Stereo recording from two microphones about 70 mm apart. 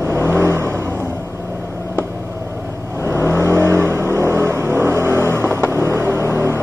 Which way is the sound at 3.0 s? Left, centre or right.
Right.